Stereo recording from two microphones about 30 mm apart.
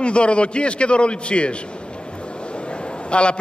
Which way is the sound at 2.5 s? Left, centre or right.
Left.